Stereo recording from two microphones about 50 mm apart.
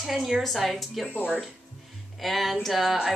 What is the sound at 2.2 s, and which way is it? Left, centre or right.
Speech, centre.